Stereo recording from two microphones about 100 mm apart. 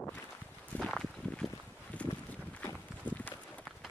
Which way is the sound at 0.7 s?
5° left (ahead or behind).